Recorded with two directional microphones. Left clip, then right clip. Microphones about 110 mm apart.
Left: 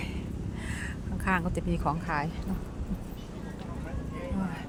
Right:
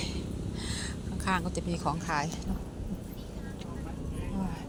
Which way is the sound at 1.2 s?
70° left (ahead or behind).